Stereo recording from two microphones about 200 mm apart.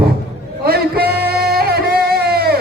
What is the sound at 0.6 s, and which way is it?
Music, 50° right (ahead or behind).